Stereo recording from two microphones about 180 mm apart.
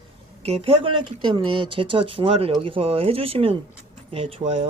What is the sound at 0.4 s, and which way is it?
Speech, 35° right (ahead or behind).